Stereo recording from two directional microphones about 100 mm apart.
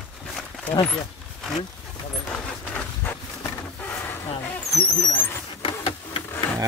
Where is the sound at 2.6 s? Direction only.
15° left (ahead or behind).